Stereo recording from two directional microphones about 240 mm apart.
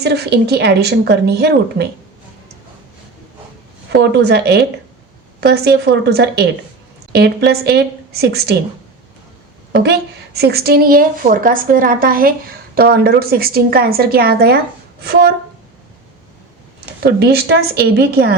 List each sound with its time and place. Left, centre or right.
0.0 s speech: right
3.8 s a woman's voice: right
9.7 s a woman's voice: right
17.0 s a woman's voice: right